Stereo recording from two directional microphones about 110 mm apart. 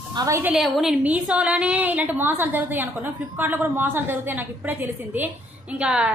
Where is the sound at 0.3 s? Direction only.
20° right (ahead or behind).